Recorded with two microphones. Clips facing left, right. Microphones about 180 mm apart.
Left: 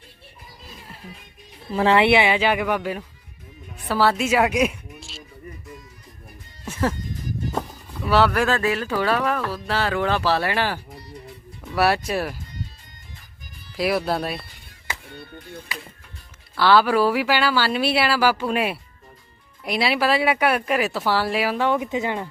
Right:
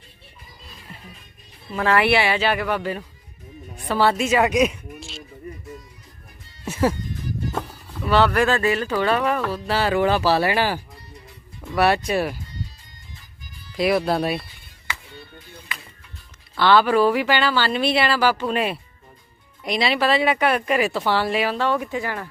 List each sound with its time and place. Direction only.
1.7 s a woman's voice: 25° left (ahead or behind); by 5.2 s centre (ahead or behind)
6.7 s music: 10° right (ahead or behind)
8.0 s speech: 5° left (ahead or behind)
13.7 s speech: centre (ahead or behind)
14.8 s music: 55° left (ahead or behind)
16.6 s speech: 5° left (ahead or behind); by 22.3 s 20° left (ahead or behind)